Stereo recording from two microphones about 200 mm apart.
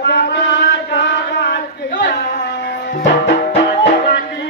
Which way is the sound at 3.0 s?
60° left (ahead or behind).